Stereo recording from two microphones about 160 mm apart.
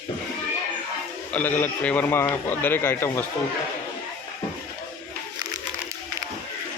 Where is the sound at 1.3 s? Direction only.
10° left (ahead or behind).